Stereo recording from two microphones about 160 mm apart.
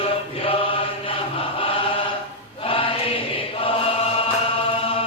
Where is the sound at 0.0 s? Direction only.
35° left (ahead or behind).